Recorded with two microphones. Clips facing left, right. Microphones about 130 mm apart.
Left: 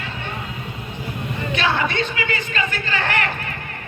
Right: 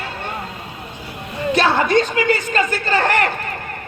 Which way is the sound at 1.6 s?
40° right (ahead or behind).